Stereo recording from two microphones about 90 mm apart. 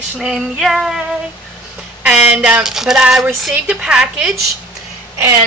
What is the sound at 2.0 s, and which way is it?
Speech, 10° right (ahead or behind).